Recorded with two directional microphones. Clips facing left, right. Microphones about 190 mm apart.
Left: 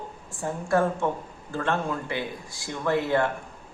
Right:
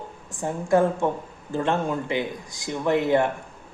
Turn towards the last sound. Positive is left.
turn(degrees=-20)  # may be behind; listen again after turning